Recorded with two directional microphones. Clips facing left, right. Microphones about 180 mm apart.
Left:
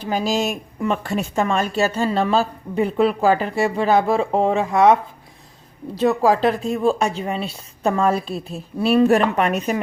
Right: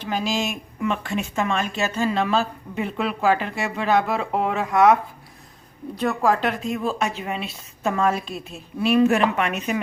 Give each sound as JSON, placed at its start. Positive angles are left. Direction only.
{"t": 0.0, "sound": "speech", "side_deg": 40}
{"t": 6.0, "sound": "speech", "side_deg": 35}